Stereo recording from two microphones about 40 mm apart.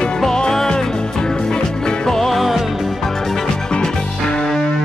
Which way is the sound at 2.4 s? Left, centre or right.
Centre.